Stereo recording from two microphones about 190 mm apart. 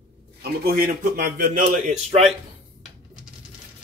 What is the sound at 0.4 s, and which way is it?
A man's voice, 50° right (ahead or behind).